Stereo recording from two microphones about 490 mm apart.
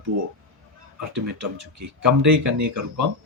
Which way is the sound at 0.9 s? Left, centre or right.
Right.